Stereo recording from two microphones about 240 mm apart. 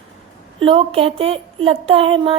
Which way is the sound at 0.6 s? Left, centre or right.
Right.